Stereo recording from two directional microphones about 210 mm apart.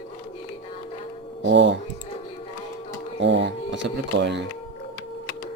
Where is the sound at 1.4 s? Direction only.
60° right (ahead or behind).